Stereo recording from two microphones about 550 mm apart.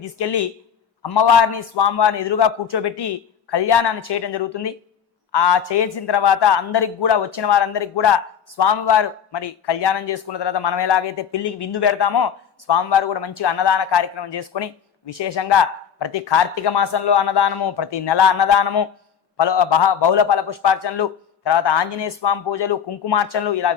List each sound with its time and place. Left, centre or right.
0.2 s a man's voice: left